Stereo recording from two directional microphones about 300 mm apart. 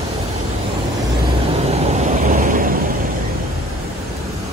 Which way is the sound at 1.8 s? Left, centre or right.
Right.